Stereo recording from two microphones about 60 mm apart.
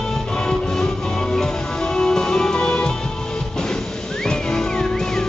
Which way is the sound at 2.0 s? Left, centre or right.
Centre.